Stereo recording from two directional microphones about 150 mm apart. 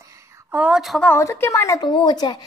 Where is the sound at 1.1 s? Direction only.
15° left (ahead or behind).